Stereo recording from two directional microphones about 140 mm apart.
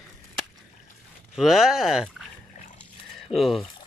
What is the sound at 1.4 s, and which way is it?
Speech, 5° right (ahead or behind).